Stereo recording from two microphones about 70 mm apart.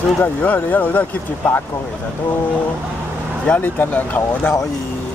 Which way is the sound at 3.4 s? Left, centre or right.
Left.